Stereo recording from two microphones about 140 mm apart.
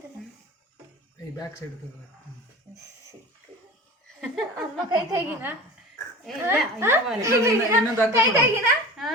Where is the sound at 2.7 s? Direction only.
20° right (ahead or behind).